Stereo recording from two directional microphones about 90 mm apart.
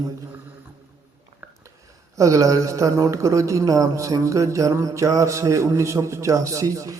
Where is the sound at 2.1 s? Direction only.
35° right (ahead or behind).